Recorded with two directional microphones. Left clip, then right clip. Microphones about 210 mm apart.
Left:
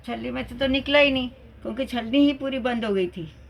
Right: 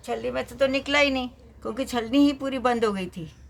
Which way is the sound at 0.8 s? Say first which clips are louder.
Left 3 dB; 50° right (ahead or behind).